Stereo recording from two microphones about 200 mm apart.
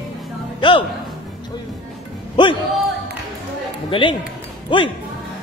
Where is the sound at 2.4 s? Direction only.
25° left (ahead or behind).